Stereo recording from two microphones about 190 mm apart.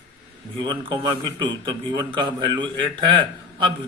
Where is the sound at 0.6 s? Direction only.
25° right (ahead or behind).